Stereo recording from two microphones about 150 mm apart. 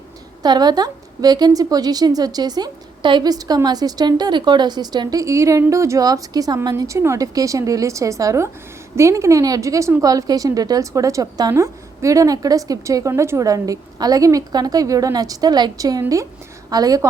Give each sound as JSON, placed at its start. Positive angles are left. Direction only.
{"t": 0.4, "sound": "a woman's voice", "side_deg": -30}